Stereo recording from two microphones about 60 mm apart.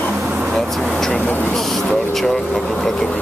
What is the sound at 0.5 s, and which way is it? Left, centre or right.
Speech, centre.